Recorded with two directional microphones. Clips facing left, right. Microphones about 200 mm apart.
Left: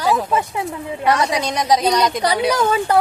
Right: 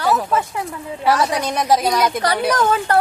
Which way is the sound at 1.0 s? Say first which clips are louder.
Even; 5° right (ahead or behind).